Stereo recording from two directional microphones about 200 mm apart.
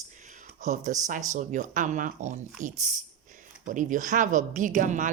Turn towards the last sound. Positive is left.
turn(degrees=-40)  # may be behind; listen again after turning